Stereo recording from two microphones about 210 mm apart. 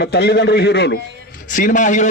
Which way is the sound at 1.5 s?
40° left (ahead or behind).